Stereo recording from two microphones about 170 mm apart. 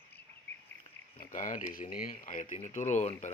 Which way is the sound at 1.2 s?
50° left (ahead or behind).